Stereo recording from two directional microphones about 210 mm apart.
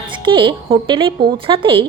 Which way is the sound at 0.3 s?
25° right (ahead or behind).